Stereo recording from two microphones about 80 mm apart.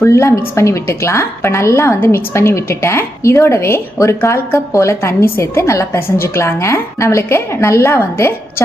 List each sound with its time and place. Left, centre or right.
0.0 s a woman's voice: left